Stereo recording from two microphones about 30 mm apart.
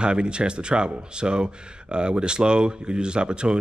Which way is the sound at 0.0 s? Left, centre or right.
Right.